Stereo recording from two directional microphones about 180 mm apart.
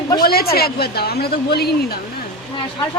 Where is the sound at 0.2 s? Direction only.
55° left (ahead or behind).